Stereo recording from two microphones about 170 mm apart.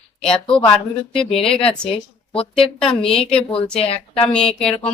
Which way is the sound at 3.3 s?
35° left (ahead or behind).